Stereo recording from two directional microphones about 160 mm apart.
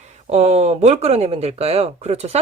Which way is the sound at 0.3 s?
45° right (ahead or behind).